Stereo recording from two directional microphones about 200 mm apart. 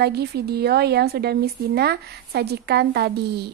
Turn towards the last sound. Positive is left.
turn(degrees=-55)  # may be behind; listen again after turning